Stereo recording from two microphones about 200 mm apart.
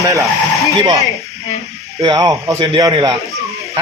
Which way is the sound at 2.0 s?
20° right (ahead or behind).